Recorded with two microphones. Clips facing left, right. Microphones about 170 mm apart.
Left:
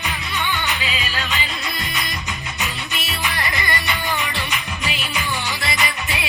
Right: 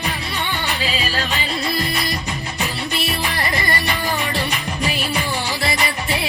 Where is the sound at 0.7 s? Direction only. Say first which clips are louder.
Right 3 dB; 35° right (ahead or behind).